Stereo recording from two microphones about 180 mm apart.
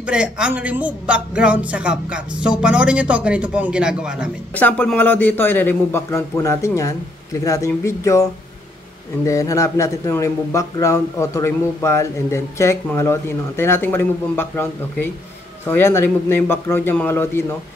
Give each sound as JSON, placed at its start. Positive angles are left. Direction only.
{"t": 0.0, "sound": "speech", "side_deg": -5}
{"t": 4.6, "sound": "speech", "side_deg": 10}